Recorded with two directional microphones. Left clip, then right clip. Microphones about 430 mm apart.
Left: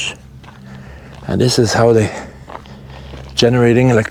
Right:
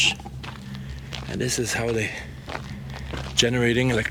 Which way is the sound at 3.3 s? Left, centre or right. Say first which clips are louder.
Left 9 dB; left.